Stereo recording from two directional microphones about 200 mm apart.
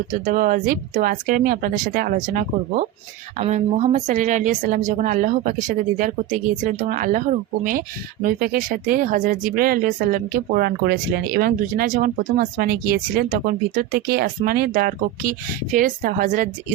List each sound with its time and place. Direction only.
0.1 s a woman's voice: 45° right (ahead or behind)